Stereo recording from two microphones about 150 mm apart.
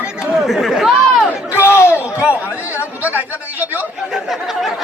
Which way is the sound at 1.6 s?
15° left (ahead or behind).